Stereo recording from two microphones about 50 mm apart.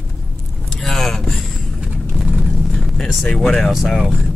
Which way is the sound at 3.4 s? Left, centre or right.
Centre.